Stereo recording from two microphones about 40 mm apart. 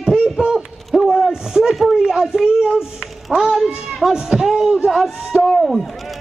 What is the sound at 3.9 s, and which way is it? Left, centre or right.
Speech, centre.